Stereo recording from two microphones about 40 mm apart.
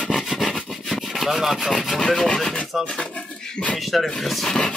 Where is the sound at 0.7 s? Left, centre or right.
Centre.